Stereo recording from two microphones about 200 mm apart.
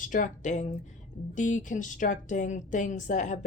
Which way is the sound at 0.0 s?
40° left (ahead or behind).